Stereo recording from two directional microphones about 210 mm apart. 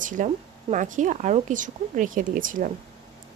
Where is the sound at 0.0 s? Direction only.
40° right (ahead or behind).